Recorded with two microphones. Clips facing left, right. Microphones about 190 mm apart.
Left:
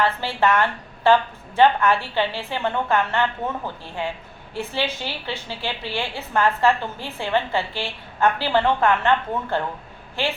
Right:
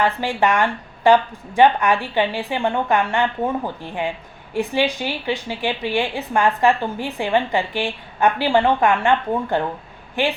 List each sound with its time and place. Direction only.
0.0 s a woman's voice: 15° right (ahead or behind)